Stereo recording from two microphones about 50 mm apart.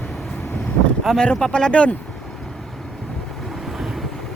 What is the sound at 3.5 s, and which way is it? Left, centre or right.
Vehicle, centre.